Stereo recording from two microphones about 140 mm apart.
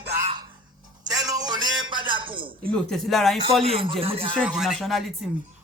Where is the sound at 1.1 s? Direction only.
25° right (ahead or behind).